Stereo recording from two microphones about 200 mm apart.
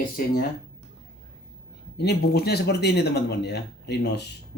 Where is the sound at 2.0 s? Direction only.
55° left (ahead or behind).